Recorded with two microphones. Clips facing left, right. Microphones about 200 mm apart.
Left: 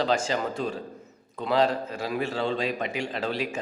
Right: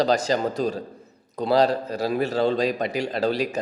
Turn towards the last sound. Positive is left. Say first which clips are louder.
# right 6 dB
turn(degrees=-40)  # may be behind; listen again after turning